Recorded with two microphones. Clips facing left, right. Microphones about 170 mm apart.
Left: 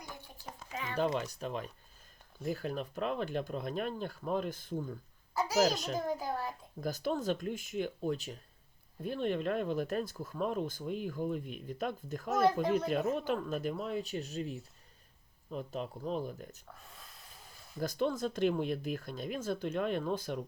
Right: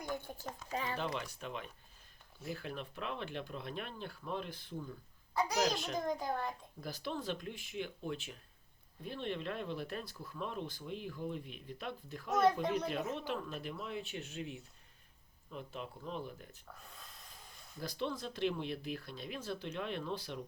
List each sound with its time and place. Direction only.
0.7 s speech: 35° right (ahead or behind)
0.9 s speech: 45° left (ahead or behind)
5.3 s a child's voice: 5° left (ahead or behind)
6.8 s speech: 45° left (ahead or behind)
12.3 s a child's voice: centre (ahead or behind)
13.1 s speech: 45° left (ahead or behind)
16.7 s speech: centre (ahead or behind)
17.7 s speech: 50° left (ahead or behind)